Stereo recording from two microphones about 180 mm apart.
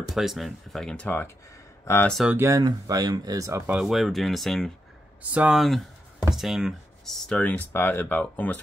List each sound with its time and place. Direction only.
0.1 s speech: centre (ahead or behind)
2.1 s speech: 10° right (ahead or behind)
3.7 s speech: centre (ahead or behind)